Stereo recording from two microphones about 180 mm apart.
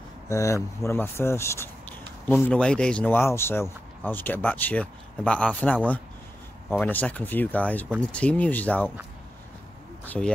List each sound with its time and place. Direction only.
0.3 s speech: 15° left (ahead or behind)
6.8 s speech: 10° left (ahead or behind)
10.0 s speech: 5° left (ahead or behind)